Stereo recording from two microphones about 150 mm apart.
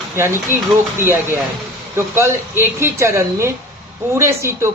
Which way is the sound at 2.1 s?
15° right (ahead or behind).